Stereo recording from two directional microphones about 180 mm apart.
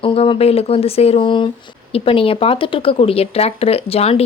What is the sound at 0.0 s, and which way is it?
Speech, 30° left (ahead or behind).